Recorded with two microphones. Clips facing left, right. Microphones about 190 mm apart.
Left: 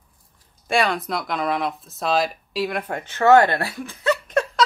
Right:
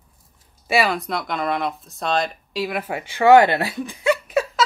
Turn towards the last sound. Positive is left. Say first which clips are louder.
# right 1 dB
turn(degrees=-5)  # may be behind; listen again after turning